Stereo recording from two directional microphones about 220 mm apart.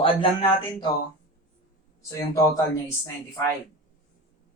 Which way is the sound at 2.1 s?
15° left (ahead or behind).